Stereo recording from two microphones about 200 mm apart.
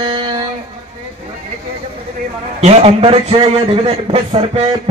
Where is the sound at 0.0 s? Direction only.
25° right (ahead or behind).